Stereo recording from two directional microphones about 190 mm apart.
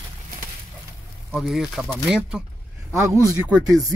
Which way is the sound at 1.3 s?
Centre (ahead or behind).